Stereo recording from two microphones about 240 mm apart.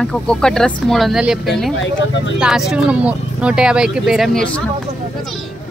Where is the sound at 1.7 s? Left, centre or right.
Left.